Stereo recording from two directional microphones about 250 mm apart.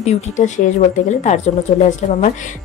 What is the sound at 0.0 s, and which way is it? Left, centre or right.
A woman's voice, left.